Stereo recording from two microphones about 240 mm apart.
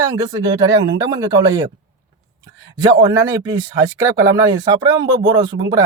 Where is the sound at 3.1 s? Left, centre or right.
Centre.